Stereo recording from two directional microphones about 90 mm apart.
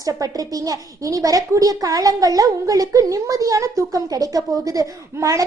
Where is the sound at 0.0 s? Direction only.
40° right (ahead or behind).